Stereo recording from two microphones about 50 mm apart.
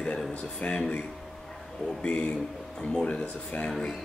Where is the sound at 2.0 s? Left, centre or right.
Left.